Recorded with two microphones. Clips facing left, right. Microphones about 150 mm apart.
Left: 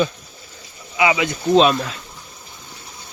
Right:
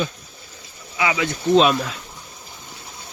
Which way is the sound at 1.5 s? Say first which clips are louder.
Left 1 dB; centre (ahead or behind).